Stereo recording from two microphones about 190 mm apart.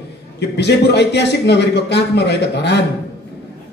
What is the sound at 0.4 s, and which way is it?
A man's voice, 65° left (ahead or behind).